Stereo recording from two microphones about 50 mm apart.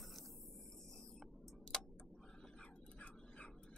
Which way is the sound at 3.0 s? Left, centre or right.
Left.